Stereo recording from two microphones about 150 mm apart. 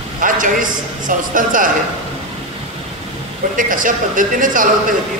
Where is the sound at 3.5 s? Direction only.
60° right (ahead or behind).